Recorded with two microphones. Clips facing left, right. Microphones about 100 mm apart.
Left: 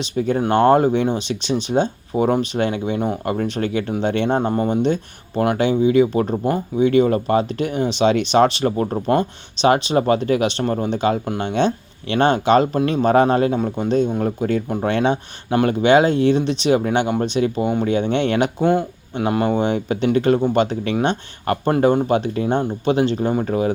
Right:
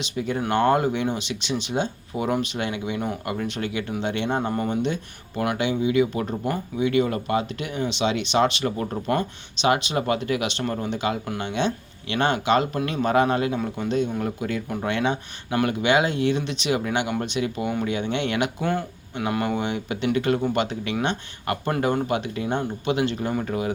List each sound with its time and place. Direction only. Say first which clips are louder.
0.0 s speech: left 7 dB; 35° left (ahead or behind)
18.6 s speech: left 8 dB; 25° left (ahead or behind)